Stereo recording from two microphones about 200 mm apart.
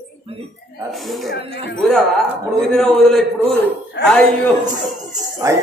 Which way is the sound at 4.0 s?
60° left (ahead or behind).